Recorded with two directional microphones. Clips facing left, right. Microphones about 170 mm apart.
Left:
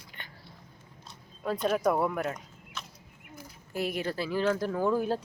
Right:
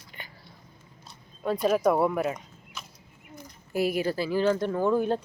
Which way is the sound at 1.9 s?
5° right (ahead or behind).